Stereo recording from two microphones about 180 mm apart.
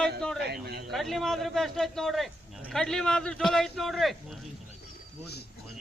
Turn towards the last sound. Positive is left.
turn(degrees=0)  # may be behind; listen again after turning